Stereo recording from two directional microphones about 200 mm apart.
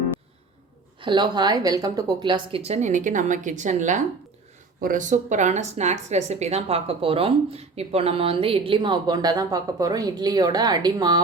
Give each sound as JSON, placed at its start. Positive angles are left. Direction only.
{"t": 1.0, "sound": "a woman's voice", "side_deg": -20}